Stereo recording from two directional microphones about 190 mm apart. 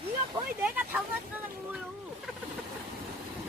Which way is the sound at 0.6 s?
5° right (ahead or behind).